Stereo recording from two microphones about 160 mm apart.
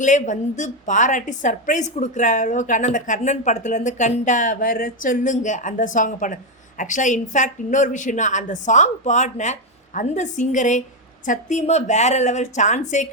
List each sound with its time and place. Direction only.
0.0 s a woman's voice: 50° left (ahead or behind)